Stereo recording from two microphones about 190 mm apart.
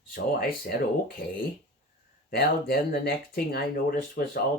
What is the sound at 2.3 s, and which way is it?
Speech, 55° left (ahead or behind).